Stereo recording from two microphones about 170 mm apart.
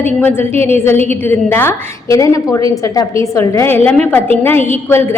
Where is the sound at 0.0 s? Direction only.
10° left (ahead or behind).